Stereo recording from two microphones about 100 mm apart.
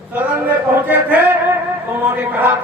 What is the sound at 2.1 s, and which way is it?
Speech, 15° right (ahead or behind).